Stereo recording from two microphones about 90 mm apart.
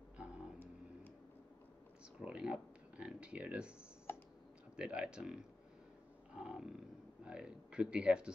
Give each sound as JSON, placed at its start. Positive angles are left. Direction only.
{"t": 2.1, "sound": "speech", "side_deg": -10}
{"t": 4.1, "sound": "clicking", "side_deg": 25}
{"t": 4.7, "sound": "speech", "side_deg": -10}